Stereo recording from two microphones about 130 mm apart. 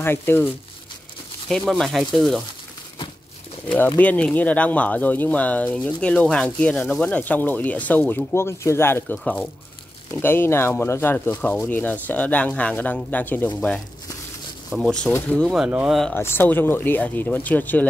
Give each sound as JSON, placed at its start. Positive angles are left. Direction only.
{"t": 0.0, "sound": "speech", "side_deg": 15}
{"t": 1.5, "sound": "speech", "side_deg": 5}
{"t": 3.6, "sound": "speech", "side_deg": 15}
{"t": 9.2, "sound": "speech", "side_deg": 10}
{"t": 14.7, "sound": "speech", "side_deg": 15}
{"t": 16.2, "sound": "speech", "side_deg": 15}